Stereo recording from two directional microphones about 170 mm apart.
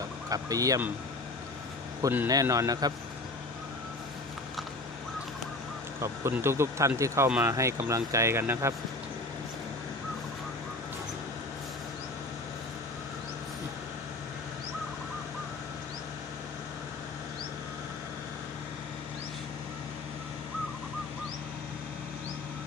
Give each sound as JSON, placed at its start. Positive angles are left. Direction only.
{"t": 0.3, "sound": "speech", "side_deg": -20}
{"t": 2.0, "sound": "a man's voice", "side_deg": -20}
{"t": 6.0, "sound": "speech", "side_deg": -15}